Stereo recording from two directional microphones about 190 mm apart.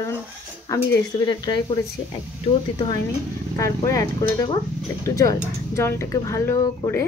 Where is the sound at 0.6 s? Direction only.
20° left (ahead or behind).